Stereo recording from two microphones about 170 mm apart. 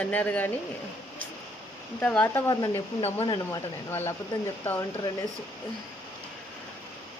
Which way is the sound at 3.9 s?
15° left (ahead or behind).